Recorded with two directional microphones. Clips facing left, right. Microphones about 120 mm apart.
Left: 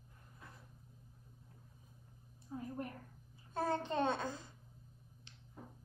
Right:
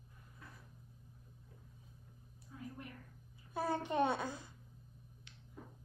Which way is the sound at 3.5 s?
10° right (ahead or behind).